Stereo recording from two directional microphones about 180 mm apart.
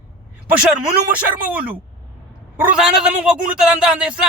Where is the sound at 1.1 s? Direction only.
5° right (ahead or behind).